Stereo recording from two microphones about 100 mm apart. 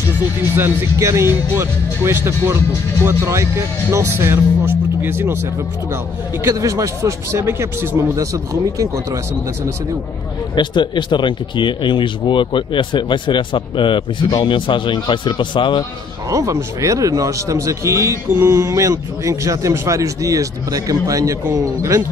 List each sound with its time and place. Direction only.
0.6 s speech: 20° right (ahead or behind)
6.4 s a man's voice: 35° right (ahead or behind)
10.5 s speech: 50° left (ahead or behind)
16.3 s a man's voice: 30° right (ahead or behind)